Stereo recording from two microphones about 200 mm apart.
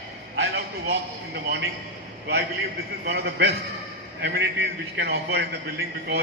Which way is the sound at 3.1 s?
60° right (ahead or behind).